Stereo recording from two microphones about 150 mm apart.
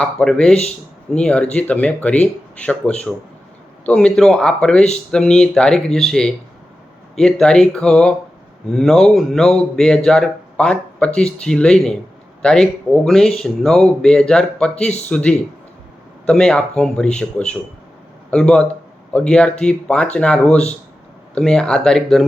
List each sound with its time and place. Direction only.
0.0 s speech: 5° left (ahead or behind)